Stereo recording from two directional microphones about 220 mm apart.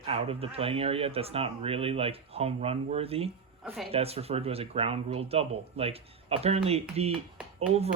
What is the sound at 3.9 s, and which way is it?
Speech, 25° right (ahead or behind).